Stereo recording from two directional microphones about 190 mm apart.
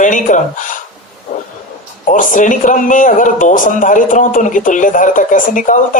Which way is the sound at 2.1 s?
45° left (ahead or behind).